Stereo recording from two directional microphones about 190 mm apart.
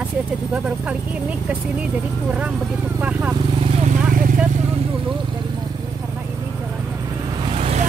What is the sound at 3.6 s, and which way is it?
Vehicle, 35° right (ahead or behind).